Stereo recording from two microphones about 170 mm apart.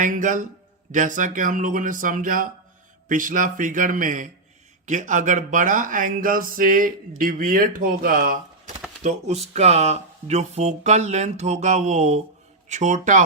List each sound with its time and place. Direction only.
0.0 s speech: 50° right (ahead or behind)
9.0 s speech: 40° right (ahead or behind)